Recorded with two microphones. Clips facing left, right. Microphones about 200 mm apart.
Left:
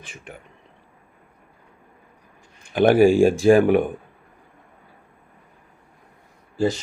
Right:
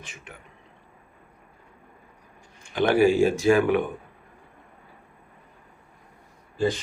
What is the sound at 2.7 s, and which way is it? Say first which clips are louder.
Speech: left 5 dB; 50° left (ahead or behind).